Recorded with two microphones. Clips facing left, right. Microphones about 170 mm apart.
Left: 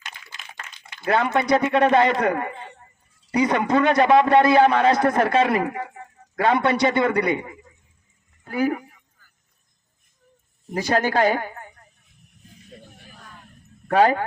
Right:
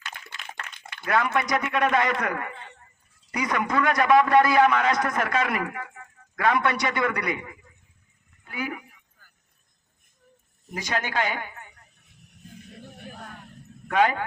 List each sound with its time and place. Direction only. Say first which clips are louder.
0.1 s a sound: right 2 dB; 60° right (ahead or behind)
1.0 s a man's voice: left 4 dB; 30° left (ahead or behind)
8.4 s speech: left 10 dB; 40° left (ahead or behind)
10.7 s speech: left 8 dB; 35° left (ahead or behind)
13.8 s speech: left 5 dB; 35° left (ahead or behind)